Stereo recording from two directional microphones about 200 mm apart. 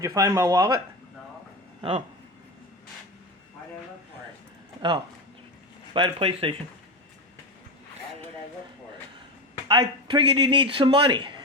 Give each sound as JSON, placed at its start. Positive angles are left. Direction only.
{"t": 0.0, "sound": "speech", "side_deg": -15}
{"t": 1.8, "sound": "speech", "side_deg": -35}
{"t": 5.9, "sound": "speech", "side_deg": -25}
{"t": 9.6, "sound": "speech", "side_deg": -25}